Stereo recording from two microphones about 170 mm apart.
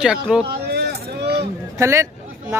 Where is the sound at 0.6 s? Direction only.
75° right (ahead or behind).